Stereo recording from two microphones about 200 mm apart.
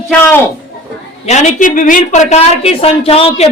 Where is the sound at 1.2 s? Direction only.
35° left (ahead or behind).